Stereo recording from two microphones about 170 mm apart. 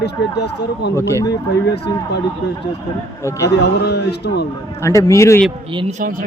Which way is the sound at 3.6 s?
80° left.